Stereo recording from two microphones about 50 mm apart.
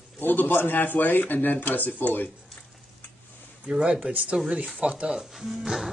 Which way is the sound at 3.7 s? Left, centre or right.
Centre.